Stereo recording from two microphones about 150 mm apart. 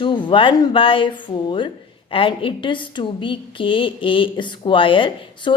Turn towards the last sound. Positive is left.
turn(degrees=35)  # may be behind; listen again after turning